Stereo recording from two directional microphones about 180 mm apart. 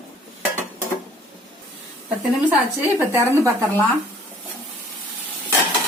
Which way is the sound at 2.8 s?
10° right (ahead or behind).